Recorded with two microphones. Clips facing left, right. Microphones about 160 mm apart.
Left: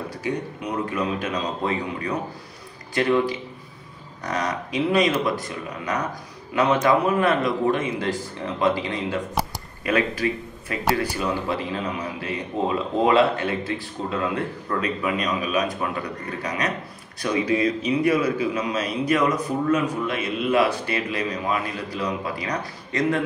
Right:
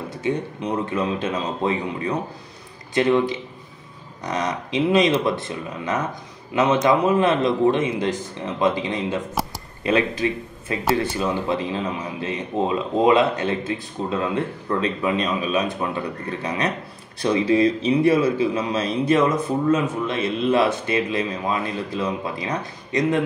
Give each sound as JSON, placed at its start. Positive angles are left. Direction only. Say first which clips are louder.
{"t": 0.1, "sound": "a man's voice", "louder": "right 3 dB", "side_deg": -25}